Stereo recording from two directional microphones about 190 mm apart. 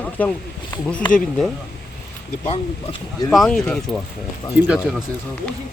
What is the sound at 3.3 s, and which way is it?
Speech, 5° left (ahead or behind).